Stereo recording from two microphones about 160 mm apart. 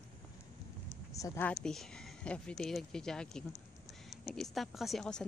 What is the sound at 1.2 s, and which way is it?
Speech, 20° left (ahead or behind).